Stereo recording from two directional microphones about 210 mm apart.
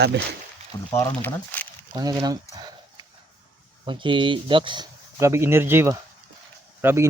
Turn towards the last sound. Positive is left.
turn(degrees=-10)  # may be behind; listen again after turning